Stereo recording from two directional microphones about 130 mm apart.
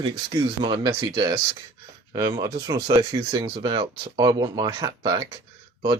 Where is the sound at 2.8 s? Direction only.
40° right (ahead or behind).